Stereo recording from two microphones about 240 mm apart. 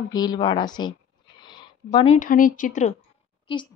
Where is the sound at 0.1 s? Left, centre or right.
Centre.